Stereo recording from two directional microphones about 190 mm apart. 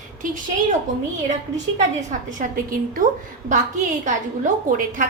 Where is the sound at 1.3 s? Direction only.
40° right (ahead or behind).